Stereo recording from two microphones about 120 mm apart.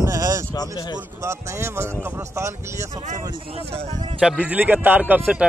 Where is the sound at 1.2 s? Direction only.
20° right (ahead or behind).